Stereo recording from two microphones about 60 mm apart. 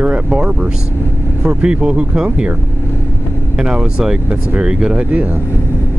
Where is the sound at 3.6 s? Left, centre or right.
Centre.